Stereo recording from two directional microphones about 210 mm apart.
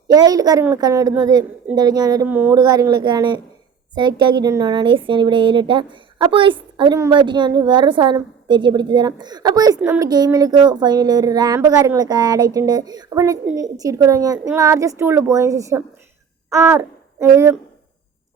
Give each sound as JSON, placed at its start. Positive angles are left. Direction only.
{"t": 0.1, "sound": "a child's voice", "side_deg": -20}